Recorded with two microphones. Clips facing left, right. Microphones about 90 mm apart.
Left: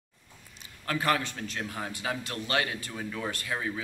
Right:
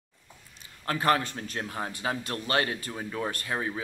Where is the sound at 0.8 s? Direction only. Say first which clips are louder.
Right 3 dB; 35° right (ahead or behind).